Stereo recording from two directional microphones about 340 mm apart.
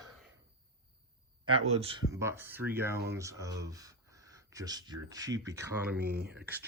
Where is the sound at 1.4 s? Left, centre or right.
Centre.